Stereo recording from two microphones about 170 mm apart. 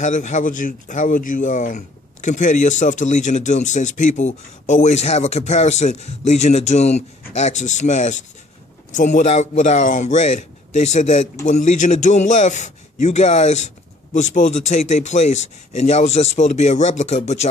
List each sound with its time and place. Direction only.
0.0 s speech: 45° left (ahead or behind)